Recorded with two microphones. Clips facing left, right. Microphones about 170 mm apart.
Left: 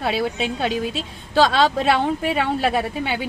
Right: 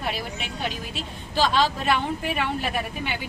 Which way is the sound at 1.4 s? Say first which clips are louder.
Left 6 dB; 90° left.